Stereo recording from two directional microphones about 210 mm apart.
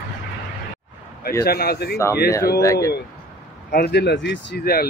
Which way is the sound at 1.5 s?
50° left (ahead or behind).